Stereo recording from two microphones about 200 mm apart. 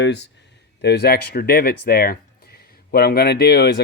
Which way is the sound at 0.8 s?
55° left (ahead or behind).